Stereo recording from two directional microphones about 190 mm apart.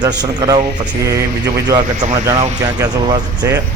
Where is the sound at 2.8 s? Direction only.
20° right (ahead or behind).